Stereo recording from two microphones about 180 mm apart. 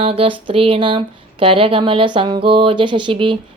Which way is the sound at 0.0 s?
30° right (ahead or behind).